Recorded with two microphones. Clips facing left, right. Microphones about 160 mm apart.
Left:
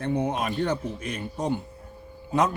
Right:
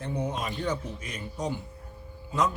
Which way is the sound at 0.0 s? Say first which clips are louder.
Left 6 dB; 65° left (ahead or behind).